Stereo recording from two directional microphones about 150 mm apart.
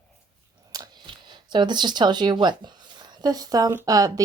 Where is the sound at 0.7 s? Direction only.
25° right (ahead or behind).